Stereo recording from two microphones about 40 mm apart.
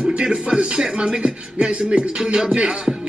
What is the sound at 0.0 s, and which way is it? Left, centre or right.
A man's voice, centre.